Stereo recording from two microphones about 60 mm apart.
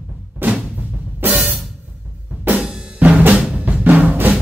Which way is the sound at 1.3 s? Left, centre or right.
Centre.